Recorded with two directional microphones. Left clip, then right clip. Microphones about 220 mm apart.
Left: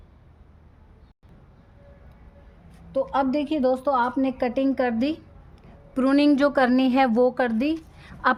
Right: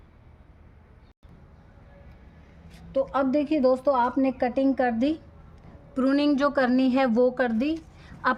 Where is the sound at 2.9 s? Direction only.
20° left (ahead or behind).